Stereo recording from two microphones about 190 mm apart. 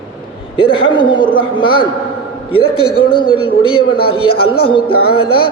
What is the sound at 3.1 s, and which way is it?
A man's voice, 25° left (ahead or behind).